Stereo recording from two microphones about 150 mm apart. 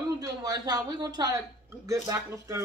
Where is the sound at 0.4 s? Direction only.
25° right (ahead or behind).